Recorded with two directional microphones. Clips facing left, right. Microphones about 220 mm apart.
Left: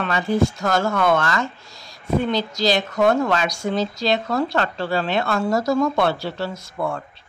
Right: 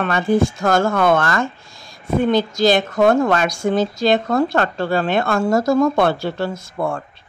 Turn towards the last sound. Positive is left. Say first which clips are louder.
# right 3 dB
turn(degrees=-50)  # may be behind; listen again after turning